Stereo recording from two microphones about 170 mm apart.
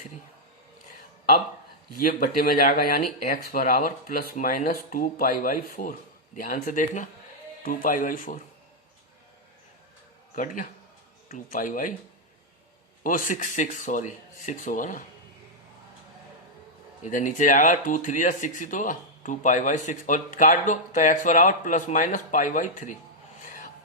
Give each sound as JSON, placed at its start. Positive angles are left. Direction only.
{"t": 2.0, "sound": "speech", "side_deg": 55}
{"t": 10.3, "sound": "speech", "side_deg": 50}
{"t": 13.0, "sound": "speech", "side_deg": 50}
{"t": 17.0, "sound": "speech", "side_deg": 50}